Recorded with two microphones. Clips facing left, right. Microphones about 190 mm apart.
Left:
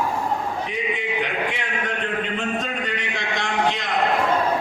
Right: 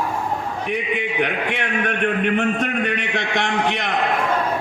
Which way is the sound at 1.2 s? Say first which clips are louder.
Right 3 dB; 65° right (ahead or behind).